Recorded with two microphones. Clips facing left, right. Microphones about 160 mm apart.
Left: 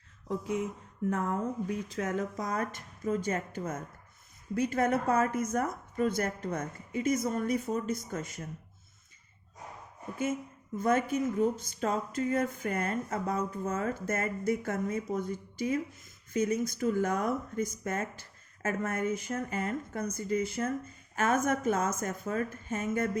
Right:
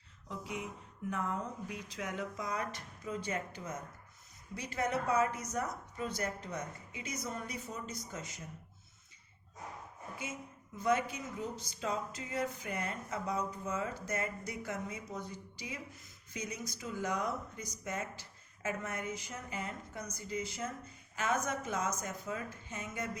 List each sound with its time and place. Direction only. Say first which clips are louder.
0.3 s speech: left 9 dB; 45° left (ahead or behind)
10.8 s speech: left 5 dB; 50° left (ahead or behind)